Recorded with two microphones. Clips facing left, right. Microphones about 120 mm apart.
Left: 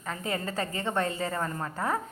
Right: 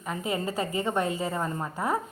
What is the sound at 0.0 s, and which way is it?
A woman's voice, 15° right (ahead or behind).